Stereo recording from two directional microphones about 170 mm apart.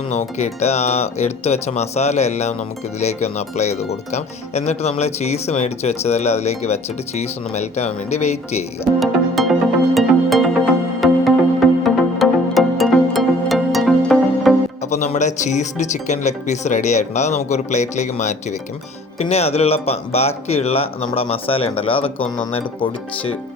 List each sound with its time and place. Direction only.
0.1 s speech: 40° left (ahead or behind)
9.0 s music: centre (ahead or behind)
14.8 s speech: 45° left (ahead or behind)